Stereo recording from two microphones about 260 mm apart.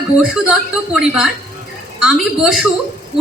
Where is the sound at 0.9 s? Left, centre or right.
Centre.